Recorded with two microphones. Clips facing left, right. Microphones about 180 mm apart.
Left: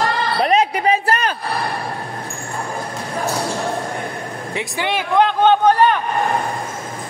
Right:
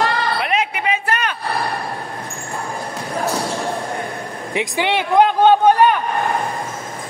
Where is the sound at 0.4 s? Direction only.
35° left (ahead or behind).